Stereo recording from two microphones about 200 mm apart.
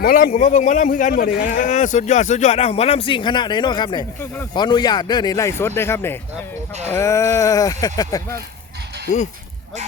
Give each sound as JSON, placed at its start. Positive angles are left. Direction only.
{"t": 0.0, "sound": "a man's voice", "side_deg": 45}